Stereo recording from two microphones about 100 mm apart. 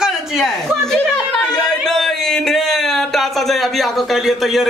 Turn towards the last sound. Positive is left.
turn(degrees=0)  # may be behind; listen again after turning